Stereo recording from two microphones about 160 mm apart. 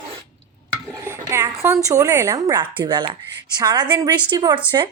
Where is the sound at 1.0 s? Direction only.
15° right (ahead or behind).